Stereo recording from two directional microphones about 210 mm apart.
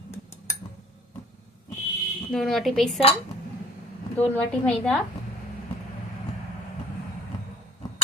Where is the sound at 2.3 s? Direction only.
Centre (ahead or behind).